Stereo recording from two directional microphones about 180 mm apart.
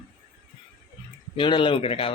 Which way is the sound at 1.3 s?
25° left (ahead or behind).